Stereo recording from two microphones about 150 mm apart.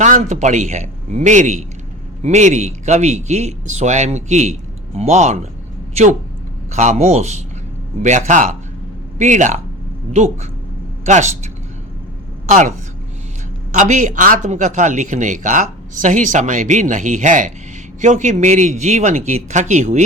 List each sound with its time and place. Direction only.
0.0 s a woman's voice: 55° right (ahead or behind)
11.0 s speech: 50° right (ahead or behind)
12.5 s a woman's voice: 55° right (ahead or behind)
13.7 s speech: 55° right (ahead or behind)